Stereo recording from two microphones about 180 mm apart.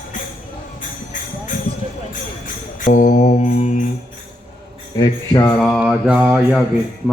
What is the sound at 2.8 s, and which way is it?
Music, 45° left (ahead or behind).